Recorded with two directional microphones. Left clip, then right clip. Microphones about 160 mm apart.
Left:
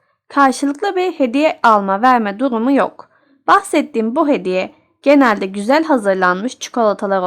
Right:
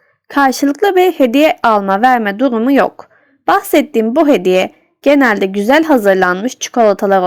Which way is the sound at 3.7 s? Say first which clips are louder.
Right 5 dB; 20° right (ahead or behind).